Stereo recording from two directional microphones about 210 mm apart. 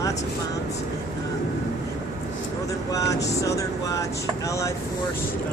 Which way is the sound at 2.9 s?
15° left (ahead or behind).